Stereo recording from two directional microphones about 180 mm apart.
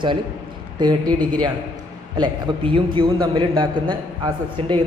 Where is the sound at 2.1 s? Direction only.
25° right (ahead or behind).